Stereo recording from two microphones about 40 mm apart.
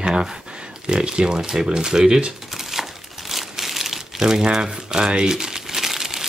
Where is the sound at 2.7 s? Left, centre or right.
Centre.